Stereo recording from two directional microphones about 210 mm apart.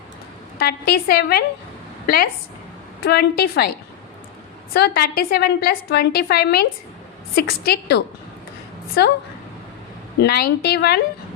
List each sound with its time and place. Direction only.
0.6 s a woman's voice: 45° left (ahead or behind)
4.7 s a woman's voice: 50° left (ahead or behind)
10.2 s a woman's voice: 50° left (ahead or behind)